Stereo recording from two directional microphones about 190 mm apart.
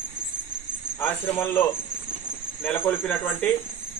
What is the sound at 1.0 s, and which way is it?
A man's voice, 15° left (ahead or behind).